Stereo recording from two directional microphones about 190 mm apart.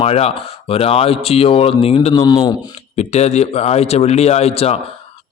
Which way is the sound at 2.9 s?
35° left (ahead or behind).